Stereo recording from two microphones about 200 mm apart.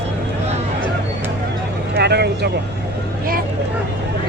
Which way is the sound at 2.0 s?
55° right (ahead or behind).